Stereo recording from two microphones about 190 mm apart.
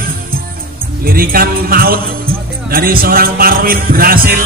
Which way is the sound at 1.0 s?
50° right (ahead or behind).